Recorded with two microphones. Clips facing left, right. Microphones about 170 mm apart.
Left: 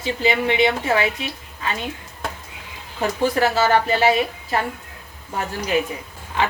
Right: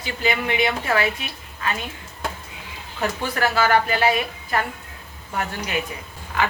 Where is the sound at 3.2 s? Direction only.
30° left (ahead or behind).